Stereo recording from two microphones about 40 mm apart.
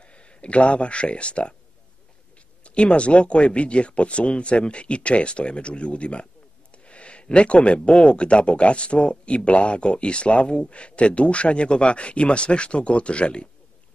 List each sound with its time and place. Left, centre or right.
0.0 s speech: left
2.6 s speech: left